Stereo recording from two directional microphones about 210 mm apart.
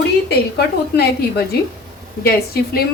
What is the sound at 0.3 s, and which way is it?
A woman's voice, 50° left (ahead or behind).